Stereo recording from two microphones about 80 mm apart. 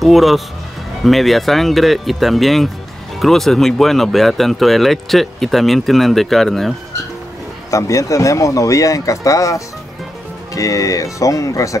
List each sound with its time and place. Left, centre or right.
0.0 s speech: centre
7.7 s speech: left